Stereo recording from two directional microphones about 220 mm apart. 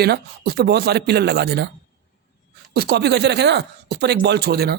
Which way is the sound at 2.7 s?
45° right (ahead or behind).